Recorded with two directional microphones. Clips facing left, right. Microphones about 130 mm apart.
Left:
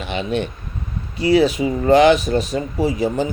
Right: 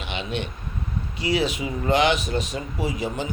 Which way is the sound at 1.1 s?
40° left (ahead or behind).